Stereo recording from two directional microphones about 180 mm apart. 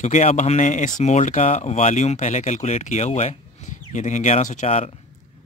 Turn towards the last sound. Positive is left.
turn(degrees=35)  # may be behind; listen again after turning